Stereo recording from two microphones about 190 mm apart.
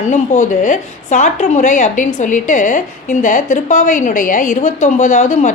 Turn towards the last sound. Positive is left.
turn(degrees=40)  # may be behind; listen again after turning